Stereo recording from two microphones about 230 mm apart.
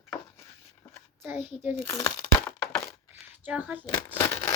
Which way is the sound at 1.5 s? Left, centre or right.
Centre.